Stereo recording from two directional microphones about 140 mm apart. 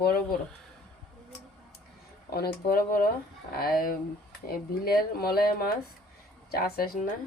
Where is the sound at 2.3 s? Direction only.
90° left.